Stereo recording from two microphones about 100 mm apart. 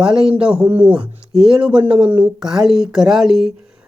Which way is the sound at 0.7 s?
20° right (ahead or behind).